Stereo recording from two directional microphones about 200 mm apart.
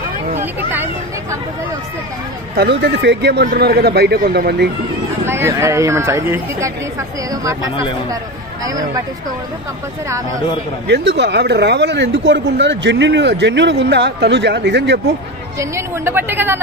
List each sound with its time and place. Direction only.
0.4 s a sound: 10° right (ahead or behind)
2.5 s a man's voice: 50° right (ahead or behind)
5.2 s speech: 10° right (ahead or behind)
8.6 s speech: 15° right (ahead or behind)
10.9 s speech: 60° right (ahead or behind)
15.6 s speech: 15° right (ahead or behind)